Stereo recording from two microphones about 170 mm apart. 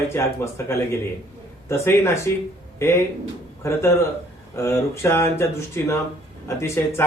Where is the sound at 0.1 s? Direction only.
15° left (ahead or behind).